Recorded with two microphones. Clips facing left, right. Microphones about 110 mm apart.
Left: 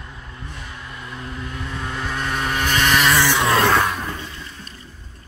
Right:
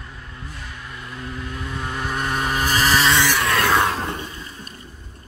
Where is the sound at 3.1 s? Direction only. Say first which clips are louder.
Left 2 dB; 20° left (ahead or behind).